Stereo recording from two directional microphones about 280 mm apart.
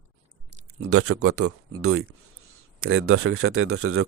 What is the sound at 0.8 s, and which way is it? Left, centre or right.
Speech, right.